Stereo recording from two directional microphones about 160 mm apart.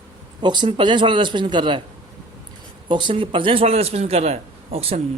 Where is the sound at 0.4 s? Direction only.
30° right (ahead or behind).